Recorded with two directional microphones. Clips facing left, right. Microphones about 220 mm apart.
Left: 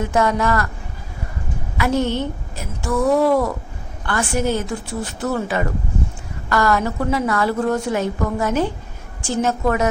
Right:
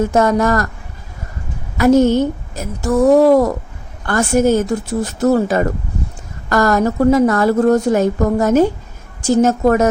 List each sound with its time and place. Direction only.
0.0 s a woman's voice: 45° right (ahead or behind)
1.8 s a woman's voice: 45° right (ahead or behind)